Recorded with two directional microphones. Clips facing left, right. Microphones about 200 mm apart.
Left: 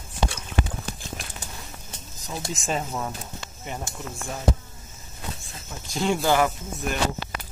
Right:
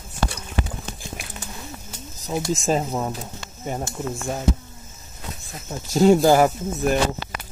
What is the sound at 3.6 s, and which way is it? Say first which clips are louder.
Speech: right 7 dB; 40° right (ahead or behind).